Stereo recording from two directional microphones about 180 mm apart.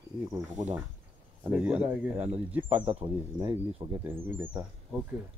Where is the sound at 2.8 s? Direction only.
25° right (ahead or behind).